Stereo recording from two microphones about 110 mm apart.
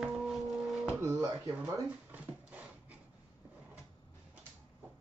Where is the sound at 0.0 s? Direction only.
5° right (ahead or behind).